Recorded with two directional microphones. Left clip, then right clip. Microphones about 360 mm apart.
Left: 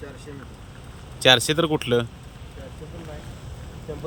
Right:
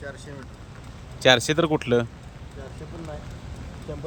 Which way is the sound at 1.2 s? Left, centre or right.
Centre.